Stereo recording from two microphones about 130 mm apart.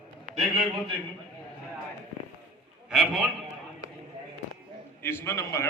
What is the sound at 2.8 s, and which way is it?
Speech, 5° right (ahead or behind).